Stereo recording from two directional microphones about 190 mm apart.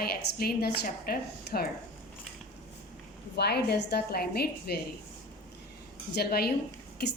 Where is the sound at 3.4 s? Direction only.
60° left (ahead or behind).